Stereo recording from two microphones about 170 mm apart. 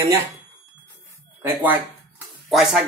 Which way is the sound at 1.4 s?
10° right (ahead or behind).